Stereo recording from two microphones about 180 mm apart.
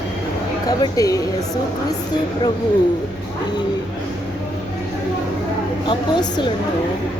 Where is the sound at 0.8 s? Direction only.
20° left (ahead or behind).